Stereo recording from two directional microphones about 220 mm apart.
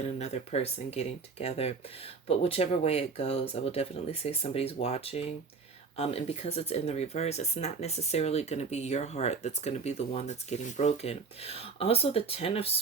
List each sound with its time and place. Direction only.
0.0 s speech: 30° left (ahead or behind)